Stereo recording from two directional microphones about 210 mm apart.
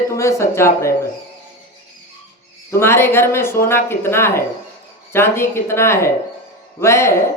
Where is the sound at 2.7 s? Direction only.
10° left (ahead or behind).